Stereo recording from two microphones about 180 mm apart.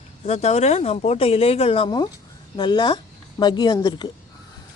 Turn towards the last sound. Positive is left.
turn(degrees=25)  # may be behind; listen again after turning